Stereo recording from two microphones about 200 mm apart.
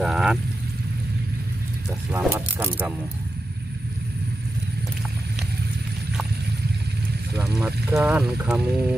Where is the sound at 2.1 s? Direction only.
10° right (ahead or behind).